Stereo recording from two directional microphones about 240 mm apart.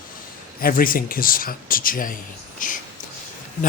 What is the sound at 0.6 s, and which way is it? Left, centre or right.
Speech, left.